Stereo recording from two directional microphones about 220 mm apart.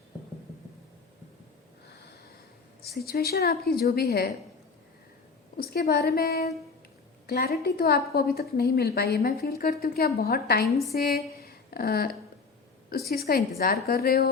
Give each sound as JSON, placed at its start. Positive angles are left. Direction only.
{"t": 2.9, "sound": "a woman's voice", "side_deg": 45}
{"t": 5.5, "sound": "a woman's voice", "side_deg": 45}